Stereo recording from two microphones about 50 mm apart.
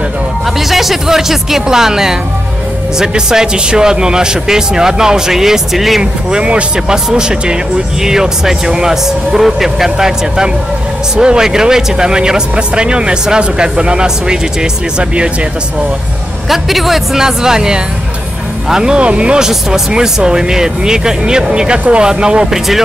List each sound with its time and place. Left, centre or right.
0.6 s speech: centre
6.3 s speech: centre
16.4 s speech: centre